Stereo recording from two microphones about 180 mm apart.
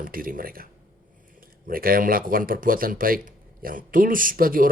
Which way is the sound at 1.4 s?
50° right (ahead or behind).